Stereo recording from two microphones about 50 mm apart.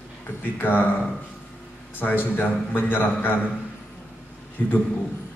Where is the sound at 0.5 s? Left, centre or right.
Left.